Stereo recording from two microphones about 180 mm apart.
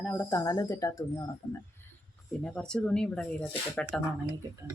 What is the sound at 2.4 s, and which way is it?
Speech, 5° left (ahead or behind).